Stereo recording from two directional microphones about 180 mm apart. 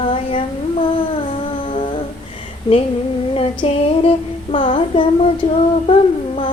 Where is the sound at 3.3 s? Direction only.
30° left (ahead or behind).